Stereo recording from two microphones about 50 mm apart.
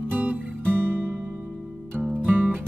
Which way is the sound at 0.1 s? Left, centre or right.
Right.